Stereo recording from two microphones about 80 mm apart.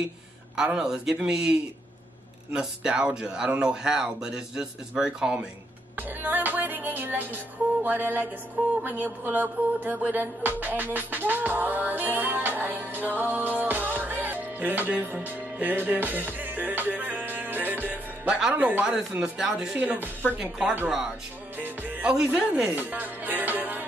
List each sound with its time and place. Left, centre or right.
0.6 s speech: centre
2.5 s speech: centre
5.9 s music: right
18.9 s speech: centre
19.8 s music: right
21.5 s music: right
22.1 s speech: centre